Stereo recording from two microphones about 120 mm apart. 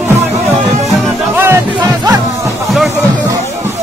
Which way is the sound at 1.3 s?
20° right (ahead or behind).